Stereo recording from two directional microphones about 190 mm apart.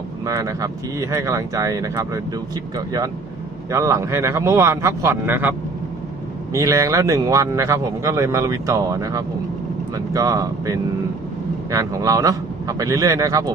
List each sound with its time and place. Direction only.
0.3 s speech: 15° right (ahead or behind)